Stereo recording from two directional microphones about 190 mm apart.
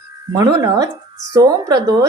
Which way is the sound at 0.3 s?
20° right (ahead or behind).